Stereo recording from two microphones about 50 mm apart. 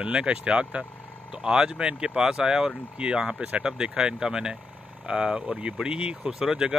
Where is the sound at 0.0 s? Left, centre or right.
Right.